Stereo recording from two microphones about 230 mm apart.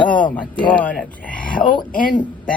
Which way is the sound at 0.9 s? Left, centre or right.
Centre.